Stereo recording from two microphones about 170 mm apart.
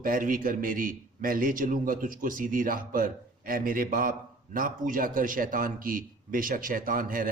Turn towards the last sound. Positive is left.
turn(degrees=-55)  # may be behind; listen again after turning